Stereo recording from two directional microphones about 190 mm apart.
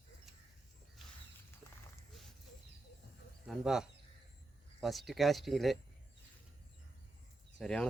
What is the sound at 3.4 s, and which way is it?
Speech, centre (ahead or behind).